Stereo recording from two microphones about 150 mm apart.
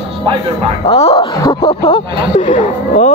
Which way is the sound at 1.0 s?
40° left (ahead or behind).